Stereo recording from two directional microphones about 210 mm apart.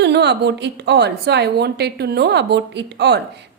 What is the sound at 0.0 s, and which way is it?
A woman's voice, 55° right (ahead or behind).